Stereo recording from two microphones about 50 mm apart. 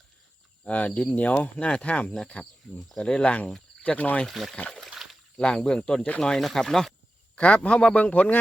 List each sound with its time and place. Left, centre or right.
0.6 s a man's voice: left
2.6 s speech: centre
3.0 s speech: centre
3.8 s speech: left
4.3 s speech: centre
5.0 s a sound: centre
5.4 s speech: centre
7.3 s a man's voice: left